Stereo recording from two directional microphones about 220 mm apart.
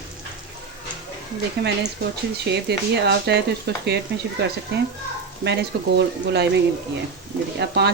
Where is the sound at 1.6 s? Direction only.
50° right (ahead or behind).